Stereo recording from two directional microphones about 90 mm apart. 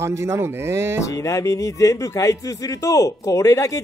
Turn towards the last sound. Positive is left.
turn(degrees=40)  # may be behind; listen again after turning